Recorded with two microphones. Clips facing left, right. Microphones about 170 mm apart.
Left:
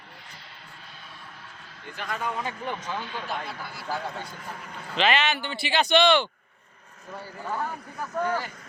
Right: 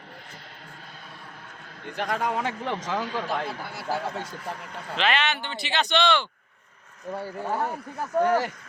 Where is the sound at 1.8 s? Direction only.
70° right (ahead or behind); by 2.9 s 90° right.